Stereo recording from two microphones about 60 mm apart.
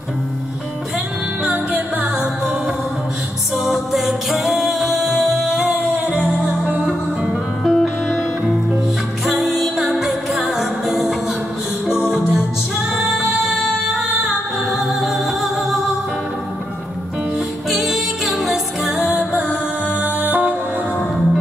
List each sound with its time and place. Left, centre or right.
1.4 s music: centre
3.5 s music: centre
12.0 s music: right
12.9 s music: centre
14.7 s music: centre
17.6 s music: centre; by 20.5 s right